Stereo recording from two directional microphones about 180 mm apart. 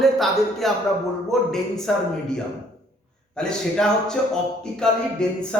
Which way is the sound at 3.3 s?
5° left (ahead or behind).